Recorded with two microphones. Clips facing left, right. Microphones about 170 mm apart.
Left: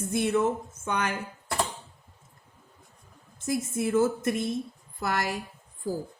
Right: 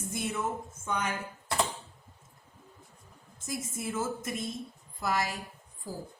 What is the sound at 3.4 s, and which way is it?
A woman's voice, 65° left (ahead or behind).